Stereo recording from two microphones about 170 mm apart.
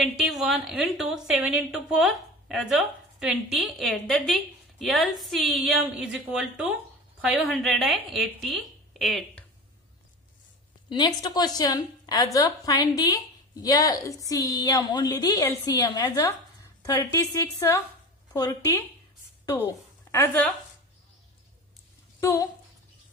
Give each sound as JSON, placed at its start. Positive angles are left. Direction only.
{"t": 0.3, "sound": "a woman's voice", "side_deg": 0}
{"t": 10.9, "sound": "a woman's voice", "side_deg": 25}
{"t": 20.1, "sound": "a woman's voice", "side_deg": 10}
{"t": 22.2, "sound": "a woman's voice", "side_deg": 15}